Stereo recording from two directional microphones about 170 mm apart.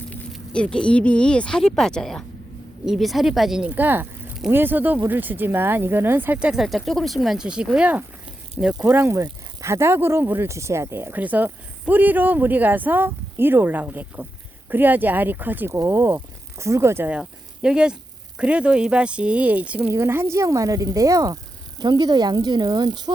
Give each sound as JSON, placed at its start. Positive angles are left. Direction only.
{"t": 0.3, "sound": "speech", "side_deg": 5}